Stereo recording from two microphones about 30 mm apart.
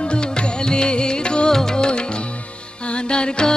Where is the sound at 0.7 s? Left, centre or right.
Left.